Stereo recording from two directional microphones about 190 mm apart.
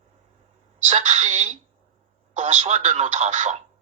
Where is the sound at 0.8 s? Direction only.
35° right (ahead or behind).